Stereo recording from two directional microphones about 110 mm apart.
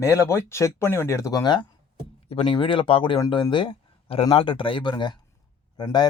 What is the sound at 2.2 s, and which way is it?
Speech, 55° left (ahead or behind).